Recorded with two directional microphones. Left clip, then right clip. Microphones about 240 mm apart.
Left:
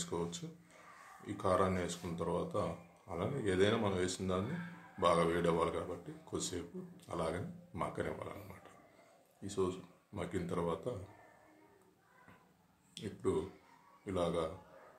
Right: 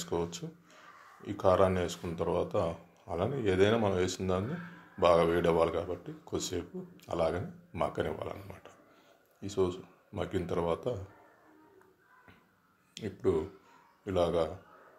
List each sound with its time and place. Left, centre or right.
0.0 s speech: right
9.4 s speech: right
12.9 s speech: right